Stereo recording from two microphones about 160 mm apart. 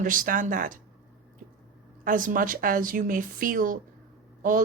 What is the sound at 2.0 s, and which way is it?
A woman's voice, 55° right (ahead or behind).